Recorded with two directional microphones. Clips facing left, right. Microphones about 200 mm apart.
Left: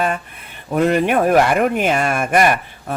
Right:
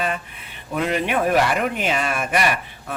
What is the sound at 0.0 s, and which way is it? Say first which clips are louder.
Speech: left 5 dB; 45° left (ahead or behind).